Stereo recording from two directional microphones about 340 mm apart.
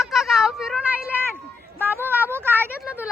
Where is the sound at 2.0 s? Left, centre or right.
Centre.